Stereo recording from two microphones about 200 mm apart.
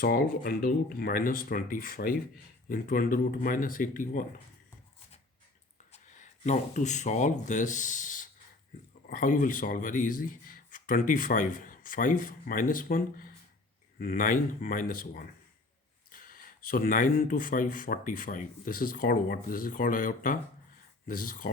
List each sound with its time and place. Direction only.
0.0 s speech: 50° left (ahead or behind)
5.9 s speech: 35° left (ahead or behind)